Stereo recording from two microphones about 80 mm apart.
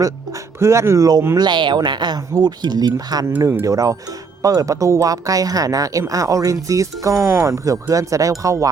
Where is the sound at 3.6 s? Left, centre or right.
Right.